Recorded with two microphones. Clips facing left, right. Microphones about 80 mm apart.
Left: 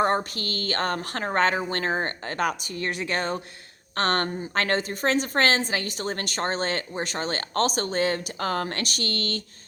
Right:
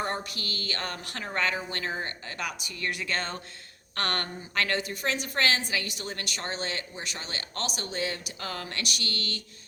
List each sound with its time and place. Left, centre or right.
0.0 s a woman's voice: left; by 3.4 s centre
3.9 s a woman's voice: left